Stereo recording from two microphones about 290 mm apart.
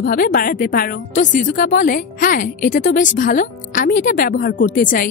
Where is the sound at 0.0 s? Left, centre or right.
Left.